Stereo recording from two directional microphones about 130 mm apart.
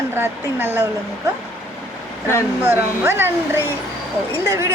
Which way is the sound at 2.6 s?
15° right (ahead or behind).